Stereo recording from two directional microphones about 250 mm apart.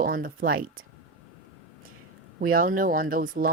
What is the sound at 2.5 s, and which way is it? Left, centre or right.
Speech, right.